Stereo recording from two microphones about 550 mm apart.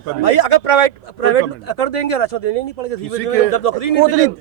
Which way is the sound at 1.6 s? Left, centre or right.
Left.